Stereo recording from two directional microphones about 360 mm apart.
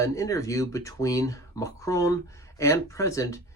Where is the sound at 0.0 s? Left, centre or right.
Centre.